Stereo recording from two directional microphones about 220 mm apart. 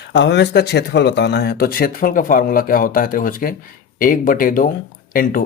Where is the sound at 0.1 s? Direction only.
50° left (ahead or behind).